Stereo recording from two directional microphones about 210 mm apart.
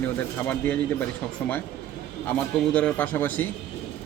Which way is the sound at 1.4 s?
10° left (ahead or behind).